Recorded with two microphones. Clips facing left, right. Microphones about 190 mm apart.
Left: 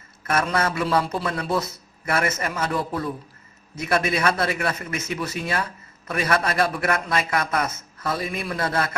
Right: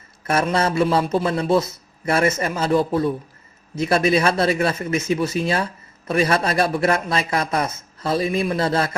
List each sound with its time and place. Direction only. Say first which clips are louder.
0.3 s a man's voice: right 3 dB; 25° right (ahead or behind)